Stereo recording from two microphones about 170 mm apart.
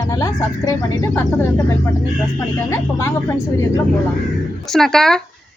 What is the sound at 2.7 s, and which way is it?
Speech, 15° left (ahead or behind).